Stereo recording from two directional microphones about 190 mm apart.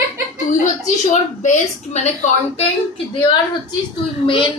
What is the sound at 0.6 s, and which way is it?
A woman's voice, 40° left (ahead or behind).